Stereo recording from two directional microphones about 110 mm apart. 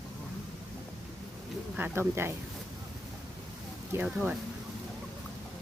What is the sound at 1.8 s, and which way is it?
Speech, 20° right (ahead or behind).